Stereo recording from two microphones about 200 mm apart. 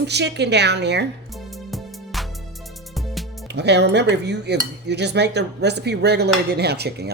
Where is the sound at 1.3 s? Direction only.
Centre (ahead or behind).